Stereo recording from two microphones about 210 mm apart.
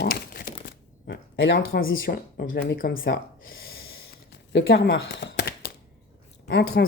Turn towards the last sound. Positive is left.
turn(degrees=50)  # may be behind; listen again after turning